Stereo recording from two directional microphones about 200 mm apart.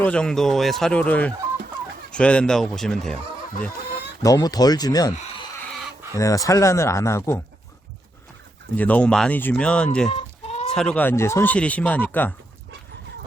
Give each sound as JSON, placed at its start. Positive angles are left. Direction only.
{"t": 0.0, "sound": "speech", "side_deg": 5}
{"t": 4.2, "sound": "speech", "side_deg": 20}
{"t": 6.1, "sound": "speech", "side_deg": 15}
{"t": 8.7, "sound": "speech", "side_deg": 10}
{"t": 10.1, "sound": "chicken", "side_deg": 30}
{"t": 10.8, "sound": "speech", "side_deg": 5}